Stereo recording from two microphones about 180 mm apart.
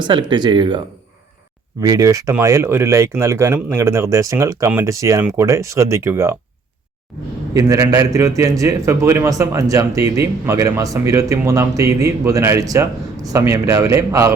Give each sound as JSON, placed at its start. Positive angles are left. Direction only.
{"t": 0.0, "sound": "speech", "side_deg": -25}
{"t": 1.8, "sound": "a man's voice", "side_deg": -20}
{"t": 7.5, "sound": "a man's voice", "side_deg": -20}